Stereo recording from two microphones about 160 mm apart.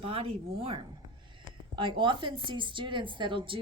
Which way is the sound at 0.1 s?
35° right (ahead or behind).